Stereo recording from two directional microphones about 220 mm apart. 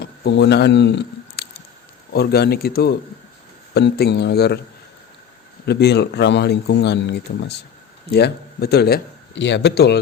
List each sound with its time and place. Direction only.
0.0 s a sound: 50° left (ahead or behind)
2.1 s speech: 45° left (ahead or behind)
5.6 s speech: 50° left (ahead or behind)